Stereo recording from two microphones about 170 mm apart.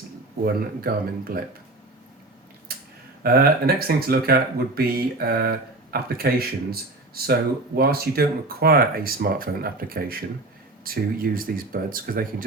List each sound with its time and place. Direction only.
0.4 s speech: 60° right (ahead or behind)
2.7 s a sound: 65° right (ahead or behind)
3.2 s speech: 65° right (ahead or behind)